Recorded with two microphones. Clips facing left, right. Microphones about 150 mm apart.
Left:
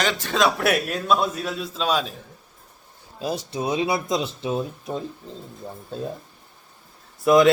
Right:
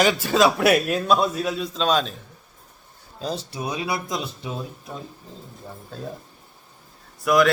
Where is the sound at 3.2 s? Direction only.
10° left (ahead or behind).